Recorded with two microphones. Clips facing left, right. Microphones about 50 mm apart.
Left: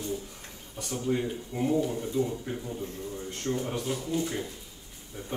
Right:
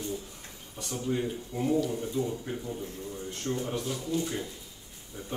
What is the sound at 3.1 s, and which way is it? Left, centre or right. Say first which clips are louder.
Speech: left 1 dB; left.